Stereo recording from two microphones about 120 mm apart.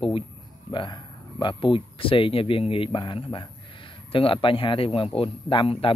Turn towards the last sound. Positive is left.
turn(degrees=50)  # may be behind; listen again after turning